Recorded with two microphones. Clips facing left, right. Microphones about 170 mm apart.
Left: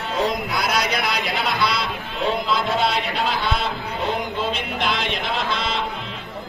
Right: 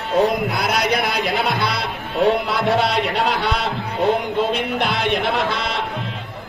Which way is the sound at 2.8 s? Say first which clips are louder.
Right 3 dB; 65° right (ahead or behind).